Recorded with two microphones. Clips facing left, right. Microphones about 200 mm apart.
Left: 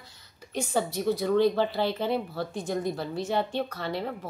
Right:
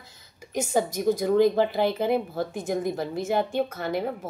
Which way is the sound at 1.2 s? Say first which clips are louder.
Right 3 dB; 15° right (ahead or behind).